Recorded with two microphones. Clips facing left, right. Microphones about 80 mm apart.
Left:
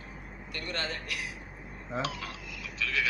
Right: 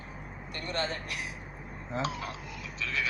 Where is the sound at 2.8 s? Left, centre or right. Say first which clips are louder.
Left 2 dB; right.